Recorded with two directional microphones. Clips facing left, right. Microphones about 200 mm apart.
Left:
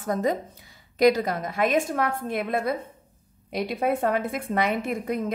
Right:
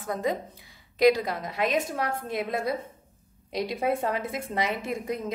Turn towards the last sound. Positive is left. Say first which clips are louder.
# left 3 dB
turn(degrees=55)  # may be behind; listen again after turning